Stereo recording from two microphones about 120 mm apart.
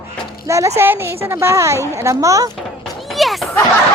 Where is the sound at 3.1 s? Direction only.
Centre (ahead or behind).